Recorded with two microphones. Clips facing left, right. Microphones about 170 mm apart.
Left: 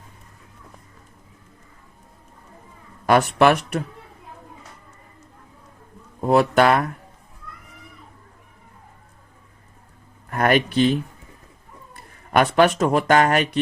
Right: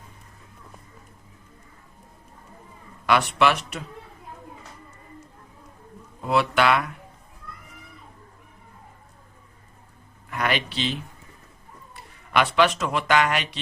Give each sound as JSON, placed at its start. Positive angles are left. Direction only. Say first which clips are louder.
{"t": 3.1, "sound": "speech", "louder": "left 5 dB", "side_deg": 45}
{"t": 6.1, "sound": "speech", "louder": "left 6 dB", "side_deg": 45}
{"t": 10.2, "sound": "speech", "louder": "left 7 dB", "side_deg": 45}